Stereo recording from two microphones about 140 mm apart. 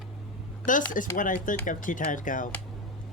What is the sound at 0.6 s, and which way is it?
A child's voice, 70° left (ahead or behind).